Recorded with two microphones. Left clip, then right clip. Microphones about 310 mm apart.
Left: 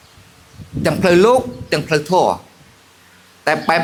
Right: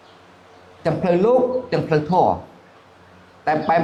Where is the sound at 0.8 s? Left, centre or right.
Left.